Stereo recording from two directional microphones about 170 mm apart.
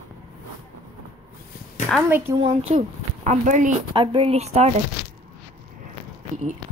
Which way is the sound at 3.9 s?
30° right (ahead or behind).